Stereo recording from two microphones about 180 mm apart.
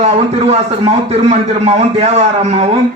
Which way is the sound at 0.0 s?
35° right (ahead or behind).